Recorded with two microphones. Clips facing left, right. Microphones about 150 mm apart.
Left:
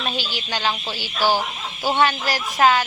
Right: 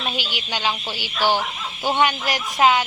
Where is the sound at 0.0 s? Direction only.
15° right (ahead or behind).